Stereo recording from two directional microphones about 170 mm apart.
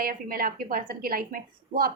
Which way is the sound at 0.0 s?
60° right (ahead or behind).